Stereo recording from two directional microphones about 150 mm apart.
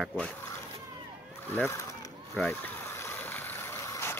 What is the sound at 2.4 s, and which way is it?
Vehicle, 15° left (ahead or behind).